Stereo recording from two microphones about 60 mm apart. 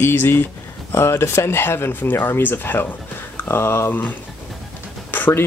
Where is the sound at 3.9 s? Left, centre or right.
Left.